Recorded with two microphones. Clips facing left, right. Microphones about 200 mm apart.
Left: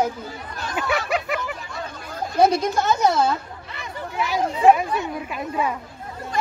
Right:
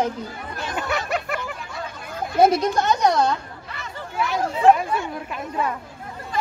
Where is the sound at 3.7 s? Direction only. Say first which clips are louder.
Left 2 dB; 20° left (ahead or behind).